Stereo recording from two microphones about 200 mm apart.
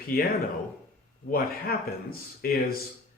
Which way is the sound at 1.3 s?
50° left (ahead or behind).